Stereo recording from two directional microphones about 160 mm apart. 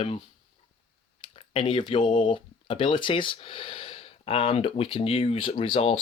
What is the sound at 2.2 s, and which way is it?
Speech, 30° left (ahead or behind).